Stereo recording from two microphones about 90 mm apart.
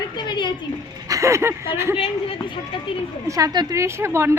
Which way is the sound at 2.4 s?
70° left (ahead or behind).